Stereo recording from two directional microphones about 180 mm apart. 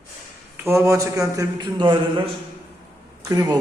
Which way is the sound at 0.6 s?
15° right (ahead or behind).